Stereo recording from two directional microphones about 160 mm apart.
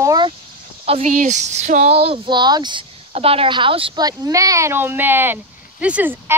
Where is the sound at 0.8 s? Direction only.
40° right (ahead or behind).